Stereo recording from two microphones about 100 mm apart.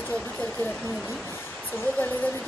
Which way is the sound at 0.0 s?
15° left (ahead or behind).